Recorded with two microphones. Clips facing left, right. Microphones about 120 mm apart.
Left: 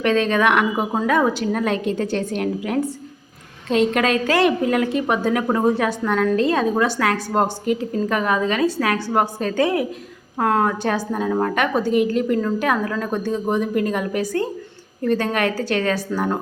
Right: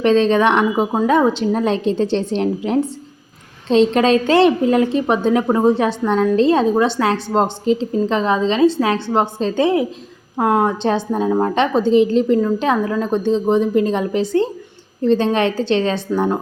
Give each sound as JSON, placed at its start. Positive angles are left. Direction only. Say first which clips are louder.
{"t": 0.0, "sound": "a woman's voice", "louder": "right 4 dB", "side_deg": -30}